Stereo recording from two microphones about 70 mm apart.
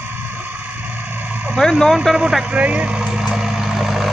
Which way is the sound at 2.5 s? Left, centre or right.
Centre.